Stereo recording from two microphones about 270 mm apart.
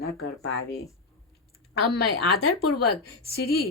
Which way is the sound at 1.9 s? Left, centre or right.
Left.